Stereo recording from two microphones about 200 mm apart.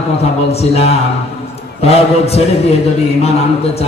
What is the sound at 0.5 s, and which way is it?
A man's voice, 30° left (ahead or behind).